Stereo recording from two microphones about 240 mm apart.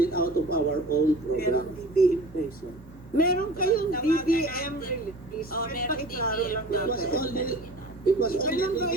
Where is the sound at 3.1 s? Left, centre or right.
Left.